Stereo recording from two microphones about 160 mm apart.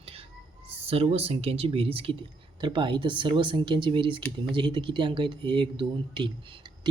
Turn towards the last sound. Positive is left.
turn(degrees=-30)  # may be behind; listen again after turning